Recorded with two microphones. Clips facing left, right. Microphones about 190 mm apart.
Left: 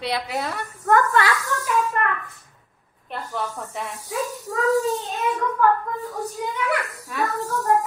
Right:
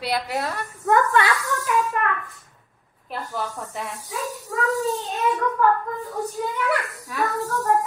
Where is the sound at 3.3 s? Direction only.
Centre (ahead or behind).